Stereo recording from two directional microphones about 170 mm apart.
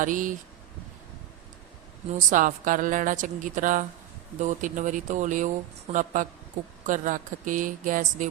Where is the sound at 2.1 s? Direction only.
50° right (ahead or behind).